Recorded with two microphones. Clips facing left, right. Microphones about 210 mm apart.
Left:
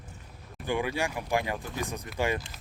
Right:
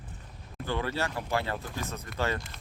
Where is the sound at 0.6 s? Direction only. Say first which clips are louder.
Left 2 dB; 15° left (ahead or behind).